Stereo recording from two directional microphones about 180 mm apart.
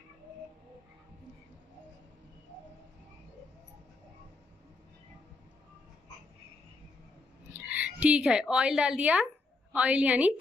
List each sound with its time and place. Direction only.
7.5 s a woman's voice: 10° right (ahead or behind)